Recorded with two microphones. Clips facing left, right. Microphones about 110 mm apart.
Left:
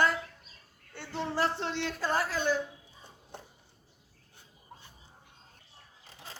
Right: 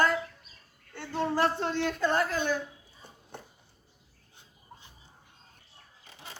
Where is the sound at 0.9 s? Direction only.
45° right (ahead or behind).